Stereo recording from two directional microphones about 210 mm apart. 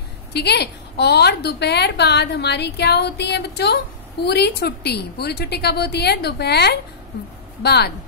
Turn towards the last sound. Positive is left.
turn(degrees=50)  # may be behind; listen again after turning